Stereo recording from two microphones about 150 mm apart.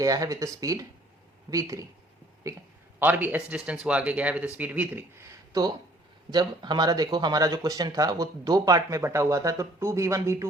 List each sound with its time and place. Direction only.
0.0 s a man's voice: 25° right (ahead or behind)